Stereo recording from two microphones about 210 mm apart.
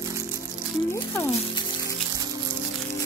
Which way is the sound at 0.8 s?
10° left (ahead or behind).